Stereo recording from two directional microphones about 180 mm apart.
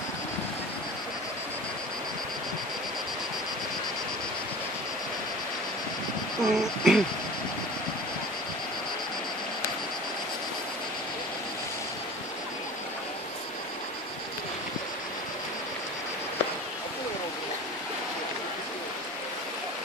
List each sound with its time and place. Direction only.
6.4 s speech: centre (ahead or behind)